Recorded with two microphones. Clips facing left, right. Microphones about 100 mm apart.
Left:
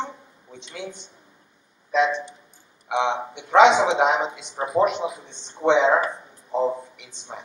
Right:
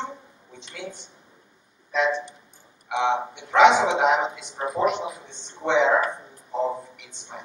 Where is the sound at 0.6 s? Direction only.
20° left (ahead or behind).